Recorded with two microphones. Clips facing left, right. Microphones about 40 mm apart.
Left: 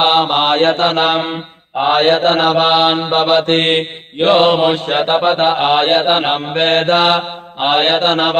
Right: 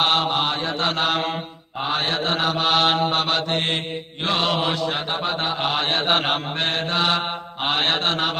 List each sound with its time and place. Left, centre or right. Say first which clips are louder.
0.0 s mantra: left 8 dB; left
0.8 s mantra: left 8 dB; left
2.7 s mantra: left 6 dB; left
3.4 s mantra: left 10 dB; left
4.8 s mantra: left 11 dB; left